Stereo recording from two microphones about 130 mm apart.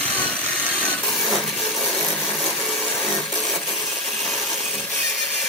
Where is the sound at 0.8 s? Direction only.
Centre (ahead or behind).